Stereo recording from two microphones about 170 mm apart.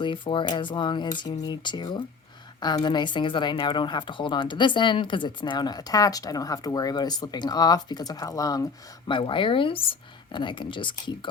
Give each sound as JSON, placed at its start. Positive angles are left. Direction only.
{"t": 0.0, "sound": "speech", "side_deg": 30}